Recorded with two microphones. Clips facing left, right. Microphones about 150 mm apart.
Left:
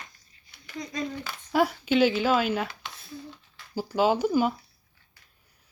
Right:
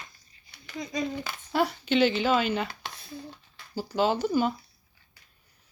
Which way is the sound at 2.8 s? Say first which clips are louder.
Right 2 dB; 35° right (ahead or behind).